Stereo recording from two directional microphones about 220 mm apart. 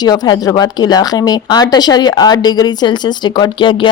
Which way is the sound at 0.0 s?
15° left (ahead or behind).